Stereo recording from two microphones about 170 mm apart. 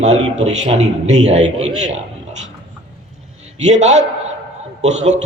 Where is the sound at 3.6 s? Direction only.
40° right (ahead or behind).